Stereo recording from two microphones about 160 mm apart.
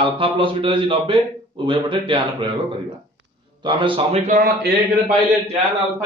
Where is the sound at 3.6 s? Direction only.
30° right (ahead or behind); by 4.4 s 45° right (ahead or behind).